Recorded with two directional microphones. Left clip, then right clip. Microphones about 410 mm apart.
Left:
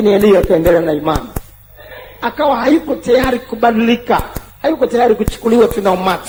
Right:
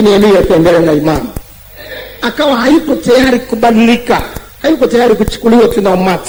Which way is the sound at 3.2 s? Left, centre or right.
Left.